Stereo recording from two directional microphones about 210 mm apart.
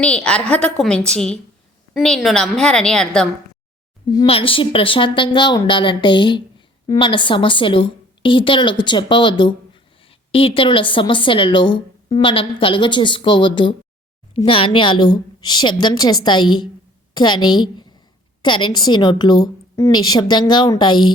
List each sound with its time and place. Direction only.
0.0 s a woman's voice: 5° left (ahead or behind)
4.1 s a woman's voice: 20° left (ahead or behind)